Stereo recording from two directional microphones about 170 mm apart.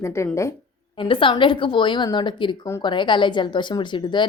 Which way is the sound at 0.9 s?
30° left (ahead or behind).